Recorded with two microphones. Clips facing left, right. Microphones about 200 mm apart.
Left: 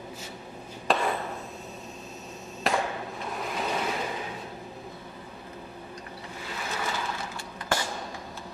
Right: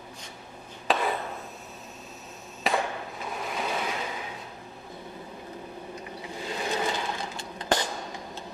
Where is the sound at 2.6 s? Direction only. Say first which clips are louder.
Even; centre (ahead or behind).